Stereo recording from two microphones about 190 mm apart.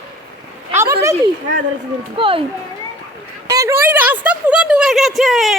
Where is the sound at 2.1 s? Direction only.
25° right (ahead or behind).